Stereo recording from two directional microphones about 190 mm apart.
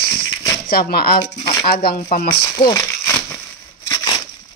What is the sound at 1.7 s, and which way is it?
Speech, 55° left (ahead or behind).